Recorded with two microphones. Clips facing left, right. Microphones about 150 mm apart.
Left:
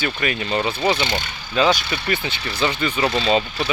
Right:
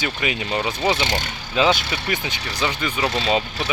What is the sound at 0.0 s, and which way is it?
Speech, 15° right (ahead or behind).